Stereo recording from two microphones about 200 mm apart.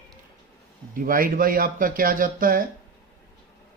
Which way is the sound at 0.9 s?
45° right (ahead or behind).